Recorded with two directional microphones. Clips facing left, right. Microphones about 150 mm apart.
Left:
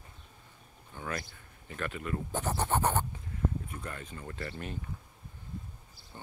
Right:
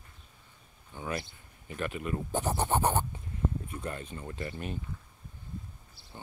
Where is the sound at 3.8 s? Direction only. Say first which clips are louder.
Right 4 dB; 25° right (ahead or behind).